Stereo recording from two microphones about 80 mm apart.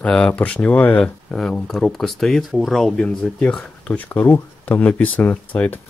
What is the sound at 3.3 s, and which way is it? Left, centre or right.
Speech, centre.